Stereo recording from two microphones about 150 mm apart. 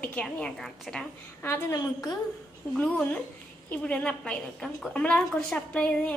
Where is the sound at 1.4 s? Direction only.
20° left (ahead or behind).